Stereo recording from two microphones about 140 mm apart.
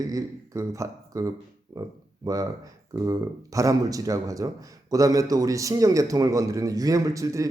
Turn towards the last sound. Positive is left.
turn(degrees=-25)  # may be behind; listen again after turning